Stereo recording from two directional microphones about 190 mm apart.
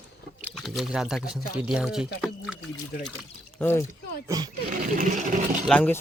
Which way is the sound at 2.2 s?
Centre (ahead or behind).